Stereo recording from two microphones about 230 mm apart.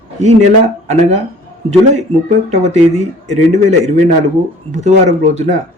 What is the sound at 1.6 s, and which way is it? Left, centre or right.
Speech, right.